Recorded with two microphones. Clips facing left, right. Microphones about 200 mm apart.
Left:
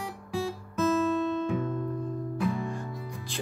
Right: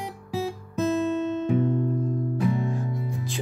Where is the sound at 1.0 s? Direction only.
20° right (ahead or behind).